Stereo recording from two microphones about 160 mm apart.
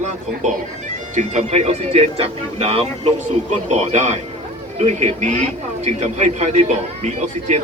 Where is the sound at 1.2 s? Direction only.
45° right (ahead or behind).